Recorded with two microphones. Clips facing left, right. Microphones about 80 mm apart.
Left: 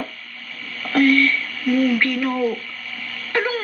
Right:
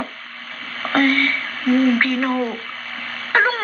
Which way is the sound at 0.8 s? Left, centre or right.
Right.